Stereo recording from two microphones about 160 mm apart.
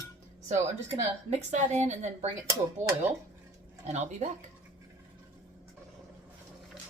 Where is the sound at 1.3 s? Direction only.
45° right (ahead or behind).